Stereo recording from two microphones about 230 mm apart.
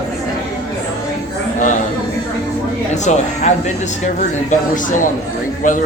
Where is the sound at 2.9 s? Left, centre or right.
Left.